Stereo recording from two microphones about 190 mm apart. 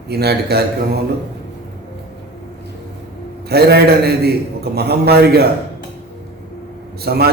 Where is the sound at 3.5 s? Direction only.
55° right (ahead or behind).